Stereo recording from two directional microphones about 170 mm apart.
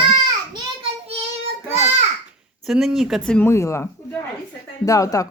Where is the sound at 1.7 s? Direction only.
40° right (ahead or behind).